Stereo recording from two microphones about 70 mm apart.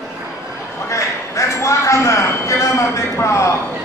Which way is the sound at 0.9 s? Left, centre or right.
Left.